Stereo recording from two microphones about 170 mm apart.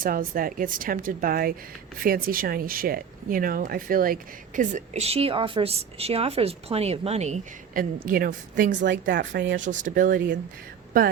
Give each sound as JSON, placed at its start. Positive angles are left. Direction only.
{"t": 0.0, "sound": "speech", "side_deg": -55}
{"t": 7.7, "sound": "speech", "side_deg": -55}
{"t": 8.9, "sound": "speech", "side_deg": -90}
{"t": 9.6, "sound": "speech", "side_deg": -50}